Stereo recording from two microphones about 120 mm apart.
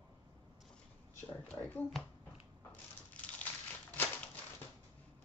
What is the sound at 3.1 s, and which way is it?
Crushing, 10° left (ahead or behind).